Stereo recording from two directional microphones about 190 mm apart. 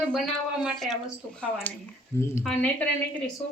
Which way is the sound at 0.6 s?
Centre (ahead or behind).